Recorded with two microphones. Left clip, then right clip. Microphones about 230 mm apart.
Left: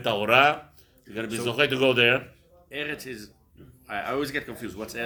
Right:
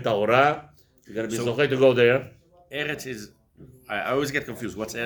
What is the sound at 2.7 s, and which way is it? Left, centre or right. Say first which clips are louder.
Speech: right 3 dB; right.